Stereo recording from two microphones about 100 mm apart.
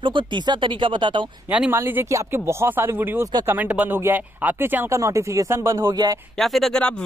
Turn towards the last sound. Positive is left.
turn(degrees=10)  # may be behind; listen again after turning